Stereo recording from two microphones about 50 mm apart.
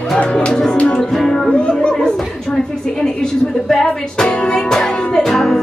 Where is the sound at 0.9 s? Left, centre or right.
Centre.